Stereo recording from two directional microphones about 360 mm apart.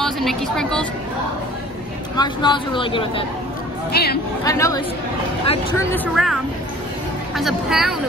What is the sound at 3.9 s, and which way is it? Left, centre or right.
Speech, left.